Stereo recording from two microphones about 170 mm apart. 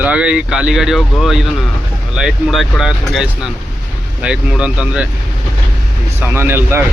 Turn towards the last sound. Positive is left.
turn(degrees=-15)  # may be behind; listen again after turning